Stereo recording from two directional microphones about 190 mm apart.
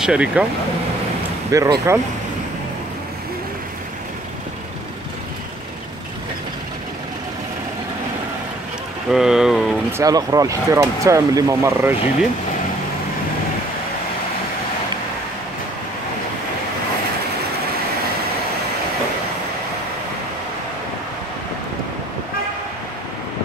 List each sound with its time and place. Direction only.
0.0 s speech: 5° right (ahead or behind)
1.5 s speech: 15° right (ahead or behind)
9.1 s speech: centre (ahead or behind)
9.9 s speech: 20° right (ahead or behind)